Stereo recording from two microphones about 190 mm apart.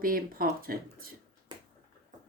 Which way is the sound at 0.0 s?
50° right (ahead or behind).